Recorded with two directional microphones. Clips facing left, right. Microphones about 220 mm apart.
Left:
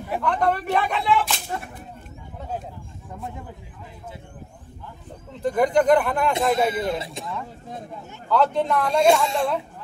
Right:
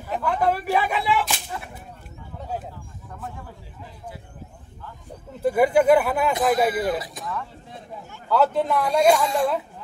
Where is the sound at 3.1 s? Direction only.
20° left (ahead or behind).